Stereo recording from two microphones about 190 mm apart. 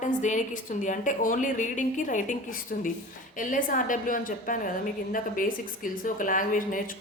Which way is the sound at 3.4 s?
45° left (ahead or behind).